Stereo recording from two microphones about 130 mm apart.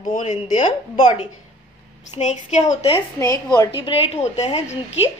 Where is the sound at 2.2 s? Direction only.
65° left (ahead or behind).